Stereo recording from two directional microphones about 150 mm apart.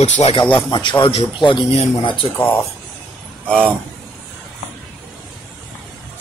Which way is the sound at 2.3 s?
15° left (ahead or behind).